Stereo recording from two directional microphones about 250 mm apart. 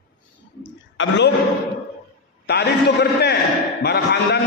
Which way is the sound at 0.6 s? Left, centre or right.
Left.